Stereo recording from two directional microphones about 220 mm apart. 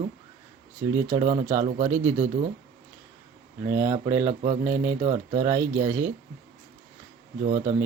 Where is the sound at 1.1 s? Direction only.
25° right (ahead or behind).